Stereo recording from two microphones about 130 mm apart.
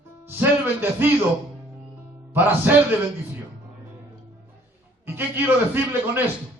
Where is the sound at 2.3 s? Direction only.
15° right (ahead or behind).